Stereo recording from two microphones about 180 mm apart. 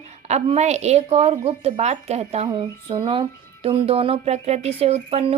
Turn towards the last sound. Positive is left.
turn(degrees=-35)  # may be behind; listen again after turning